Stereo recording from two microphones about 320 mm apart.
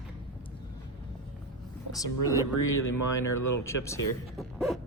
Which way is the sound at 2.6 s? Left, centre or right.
Left.